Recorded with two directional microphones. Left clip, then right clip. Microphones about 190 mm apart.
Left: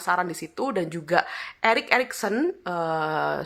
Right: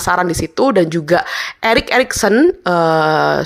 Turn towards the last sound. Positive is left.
turn(degrees=-30)  # may be behind; listen again after turning